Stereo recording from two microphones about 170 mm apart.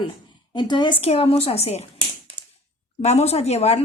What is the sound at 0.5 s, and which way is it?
A woman's voice, 25° left (ahead or behind).